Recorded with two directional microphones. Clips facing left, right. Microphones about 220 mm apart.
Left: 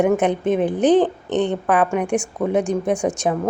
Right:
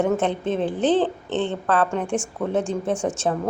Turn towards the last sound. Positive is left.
turn(degrees=15)  # may be behind; listen again after turning